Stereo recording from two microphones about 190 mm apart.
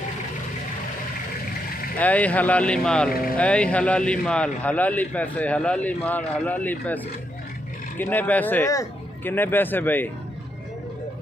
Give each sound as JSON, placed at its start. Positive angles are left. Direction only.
{"t": 2.0, "sound": "a man's voice", "side_deg": 10}
{"t": 3.1, "sound": "speech", "side_deg": 50}
{"t": 3.3, "sound": "a man's voice", "side_deg": 5}
{"t": 8.0, "sound": "a man's voice", "side_deg": 10}